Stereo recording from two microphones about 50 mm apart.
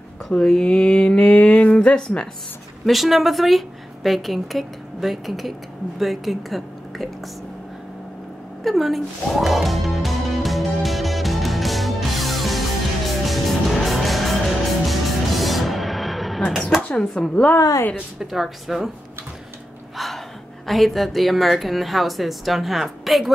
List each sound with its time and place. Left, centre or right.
0.4 s speech: centre
2.9 s a woman's voice: centre
8.6 s music: centre
16.8 s speech: centre
18.2 s a woman's voice: centre
20.6 s a woman's voice: centre